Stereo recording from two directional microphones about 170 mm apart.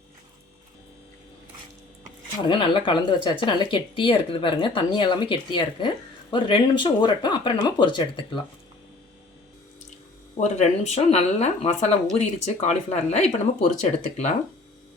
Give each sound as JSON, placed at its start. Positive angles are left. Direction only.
{"t": 2.5, "sound": "speech", "side_deg": 30}
{"t": 10.4, "sound": "speech", "side_deg": 40}